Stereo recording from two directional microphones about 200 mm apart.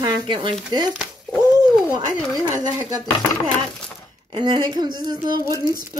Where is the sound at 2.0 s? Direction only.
15° right (ahead or behind).